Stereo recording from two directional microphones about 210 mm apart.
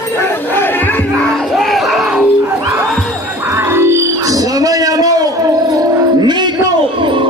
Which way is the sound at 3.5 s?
10° right (ahead or behind).